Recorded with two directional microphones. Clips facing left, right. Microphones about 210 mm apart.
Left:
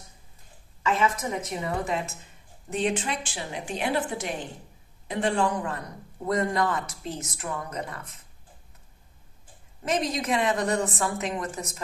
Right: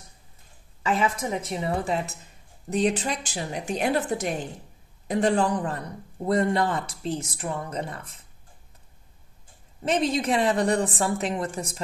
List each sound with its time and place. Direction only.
0.8 s a man's voice: 30° right (ahead or behind)
9.8 s a man's voice: 30° right (ahead or behind)